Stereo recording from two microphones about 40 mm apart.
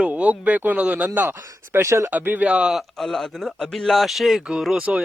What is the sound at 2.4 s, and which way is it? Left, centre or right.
Speech, right.